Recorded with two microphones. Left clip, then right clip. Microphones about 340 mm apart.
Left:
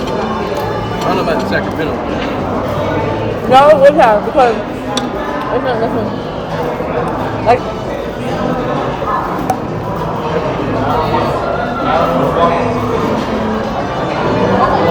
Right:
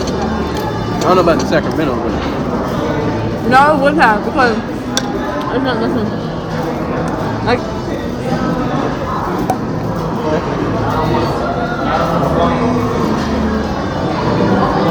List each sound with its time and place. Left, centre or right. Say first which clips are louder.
1.3 s speech: right 1 dB; centre
3.5 s speech: left 4 dB; centre